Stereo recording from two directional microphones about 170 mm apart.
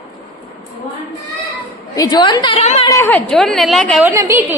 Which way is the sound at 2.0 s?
25° left (ahead or behind).